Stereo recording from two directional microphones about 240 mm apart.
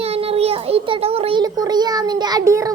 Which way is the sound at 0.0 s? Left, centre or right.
Right.